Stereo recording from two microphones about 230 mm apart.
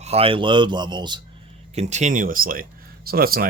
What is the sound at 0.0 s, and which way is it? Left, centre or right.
Speech, right.